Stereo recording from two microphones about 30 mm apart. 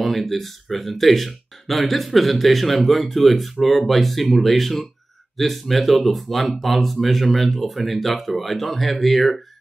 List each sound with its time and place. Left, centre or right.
0.0 s speech: centre